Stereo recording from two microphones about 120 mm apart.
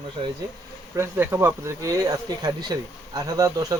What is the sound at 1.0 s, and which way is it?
Speech, 20° right (ahead or behind).